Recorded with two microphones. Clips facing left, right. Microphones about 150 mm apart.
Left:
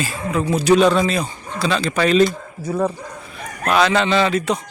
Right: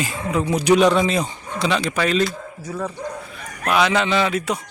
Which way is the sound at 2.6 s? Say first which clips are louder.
Left 7 dB; 35° left (ahead or behind).